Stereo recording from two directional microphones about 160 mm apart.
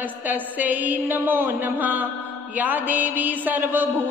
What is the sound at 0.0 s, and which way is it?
Speech, 10° right (ahead or behind).